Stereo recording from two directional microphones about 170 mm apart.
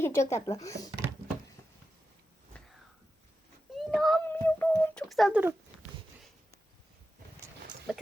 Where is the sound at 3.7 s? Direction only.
Centre (ahead or behind).